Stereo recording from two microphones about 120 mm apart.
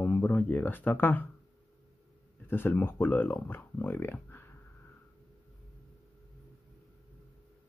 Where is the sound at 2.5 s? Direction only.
15° left (ahead or behind).